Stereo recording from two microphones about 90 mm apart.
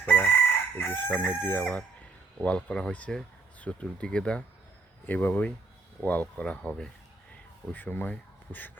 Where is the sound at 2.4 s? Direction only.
10° left (ahead or behind).